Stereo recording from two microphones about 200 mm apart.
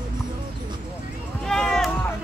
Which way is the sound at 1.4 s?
5° left (ahead or behind).